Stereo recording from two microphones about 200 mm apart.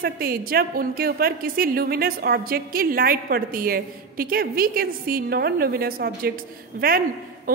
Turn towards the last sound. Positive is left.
turn(degrees=-45)  # may be behind; listen again after turning